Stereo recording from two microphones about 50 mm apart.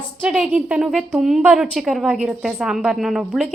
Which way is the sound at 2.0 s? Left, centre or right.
Centre.